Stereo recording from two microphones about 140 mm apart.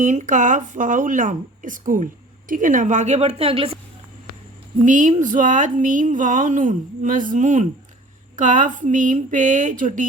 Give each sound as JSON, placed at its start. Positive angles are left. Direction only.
{"t": 0.0, "sound": "a woman's voice", "side_deg": -60}
{"t": 4.9, "sound": "speech", "side_deg": -65}